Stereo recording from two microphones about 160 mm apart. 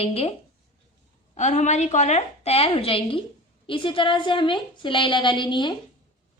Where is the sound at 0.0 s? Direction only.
40° left (ahead or behind).